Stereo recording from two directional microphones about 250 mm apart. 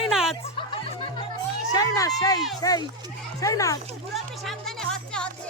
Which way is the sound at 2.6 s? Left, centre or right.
Centre.